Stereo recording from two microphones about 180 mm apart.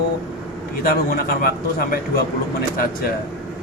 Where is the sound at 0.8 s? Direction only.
55° left (ahead or behind).